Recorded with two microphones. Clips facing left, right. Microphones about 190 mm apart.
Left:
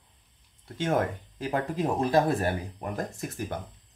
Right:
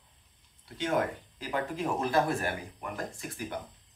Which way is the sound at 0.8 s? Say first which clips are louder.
Left 3 dB; 45° left (ahead or behind).